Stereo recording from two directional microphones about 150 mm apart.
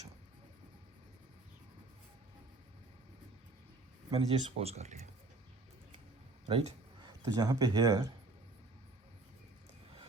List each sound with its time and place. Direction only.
4.1 s speech: 40° right (ahead or behind)
6.5 s a sound: 40° right (ahead or behind)
7.3 s speech: 25° right (ahead or behind)